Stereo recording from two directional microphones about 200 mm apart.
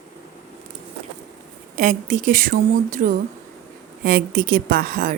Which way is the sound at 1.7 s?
40° right (ahead or behind).